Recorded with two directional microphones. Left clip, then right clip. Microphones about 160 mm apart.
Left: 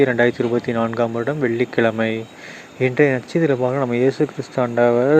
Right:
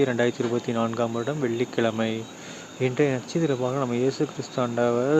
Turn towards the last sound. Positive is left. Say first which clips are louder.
# left 7 dB
turn(degrees=25)  # may be behind; listen again after turning